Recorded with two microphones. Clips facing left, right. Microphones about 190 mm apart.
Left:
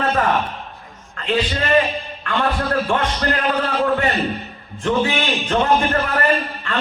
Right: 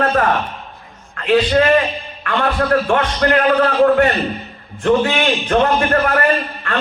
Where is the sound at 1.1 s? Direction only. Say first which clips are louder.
Right 8 dB; 60° right (ahead or behind).